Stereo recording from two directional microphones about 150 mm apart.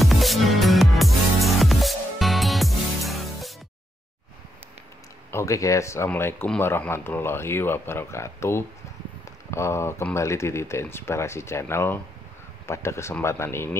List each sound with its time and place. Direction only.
0.0 s music: centre (ahead or behind)
5.3 s speech: 20° left (ahead or behind)